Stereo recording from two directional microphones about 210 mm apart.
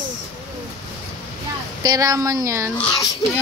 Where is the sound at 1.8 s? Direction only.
15° right (ahead or behind).